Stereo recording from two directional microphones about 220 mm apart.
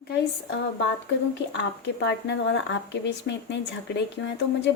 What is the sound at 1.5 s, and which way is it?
A woman's voice, 55° left (ahead or behind).